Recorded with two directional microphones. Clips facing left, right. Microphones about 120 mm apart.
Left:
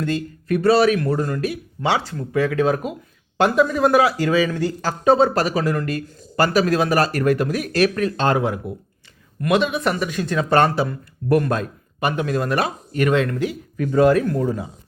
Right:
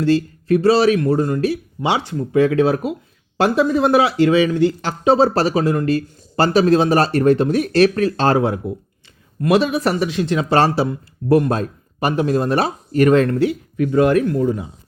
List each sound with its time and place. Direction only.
0.0 s speech: 30° right (ahead or behind)
1.8 s speech: 20° right (ahead or behind); by 10.1 s 35° right (ahead or behind)
10.2 s speech: 20° right (ahead or behind)
13.9 s speech: 30° left (ahead or behind)